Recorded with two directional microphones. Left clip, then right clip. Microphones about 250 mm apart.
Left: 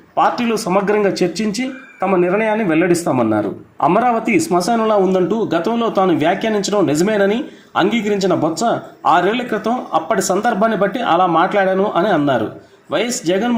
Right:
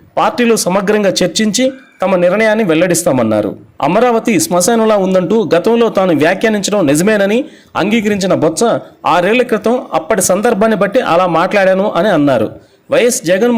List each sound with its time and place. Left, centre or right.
0.7 s speech: right